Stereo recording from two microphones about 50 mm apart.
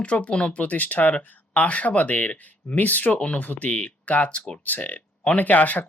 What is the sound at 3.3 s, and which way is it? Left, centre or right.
Speech, left.